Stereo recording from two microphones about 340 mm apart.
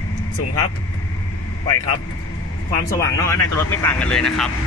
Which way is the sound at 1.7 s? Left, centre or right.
Left.